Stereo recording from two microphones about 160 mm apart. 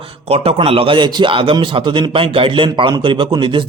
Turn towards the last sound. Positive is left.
turn(degrees=-30)  # may be behind; listen again after turning